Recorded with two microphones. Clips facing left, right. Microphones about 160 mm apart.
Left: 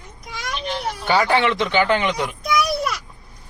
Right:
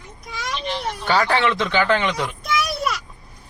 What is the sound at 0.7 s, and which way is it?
Speech, 10° left (ahead or behind).